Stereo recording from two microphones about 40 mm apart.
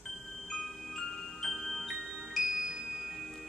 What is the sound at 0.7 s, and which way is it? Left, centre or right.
Glockenspiel, centre.